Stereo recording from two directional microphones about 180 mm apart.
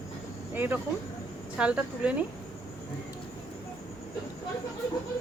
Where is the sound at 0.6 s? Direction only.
10° right (ahead or behind).